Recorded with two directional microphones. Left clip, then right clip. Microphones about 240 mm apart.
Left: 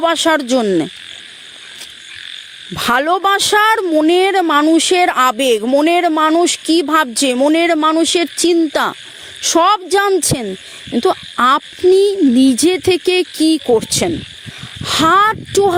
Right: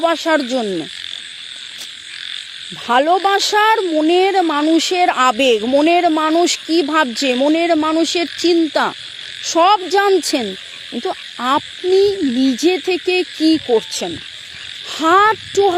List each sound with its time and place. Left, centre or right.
0.0 s frog: left
2.7 s speech: left
9.4 s frog: left